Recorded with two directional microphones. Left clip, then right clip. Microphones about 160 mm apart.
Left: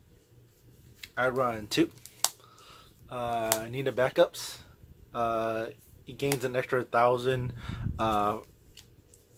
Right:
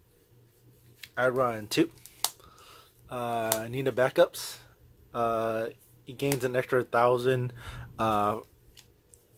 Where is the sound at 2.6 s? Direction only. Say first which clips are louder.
Even; 55° right (ahead or behind).